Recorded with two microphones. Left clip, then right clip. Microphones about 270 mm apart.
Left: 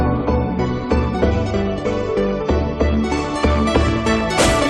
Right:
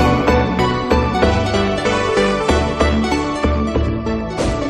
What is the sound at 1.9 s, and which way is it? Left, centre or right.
Music, right.